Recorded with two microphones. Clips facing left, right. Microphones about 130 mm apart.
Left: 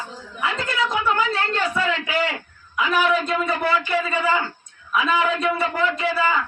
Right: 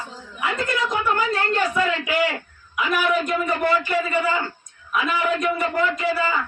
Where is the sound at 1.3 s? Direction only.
15° right (ahead or behind).